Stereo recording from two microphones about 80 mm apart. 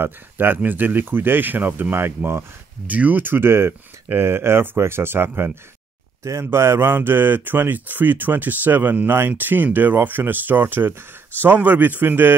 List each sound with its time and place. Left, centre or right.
0.0 s speech: right
2.9 s speech: centre